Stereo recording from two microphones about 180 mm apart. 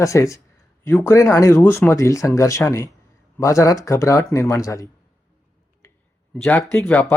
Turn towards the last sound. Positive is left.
turn(degrees=10)  # may be behind; listen again after turning